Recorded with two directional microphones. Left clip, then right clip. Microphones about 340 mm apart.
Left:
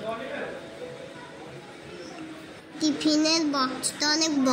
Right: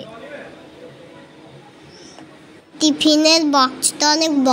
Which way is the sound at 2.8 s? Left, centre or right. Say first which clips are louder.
Right 10 dB; right.